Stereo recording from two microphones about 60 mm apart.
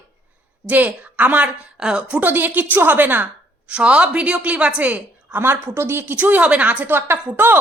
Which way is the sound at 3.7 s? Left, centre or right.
Centre.